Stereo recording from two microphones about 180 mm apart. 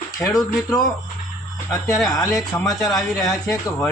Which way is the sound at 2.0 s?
20° left (ahead or behind).